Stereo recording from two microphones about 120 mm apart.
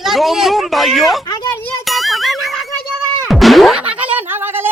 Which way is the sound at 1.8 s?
Centre (ahead or behind).